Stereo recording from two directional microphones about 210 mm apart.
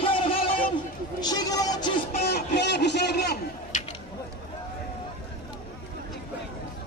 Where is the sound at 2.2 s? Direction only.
50° left (ahead or behind).